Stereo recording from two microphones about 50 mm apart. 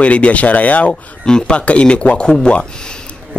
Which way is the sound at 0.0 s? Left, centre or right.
Left.